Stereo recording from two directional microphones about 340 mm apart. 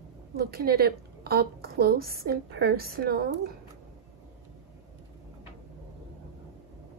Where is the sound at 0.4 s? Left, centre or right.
Right.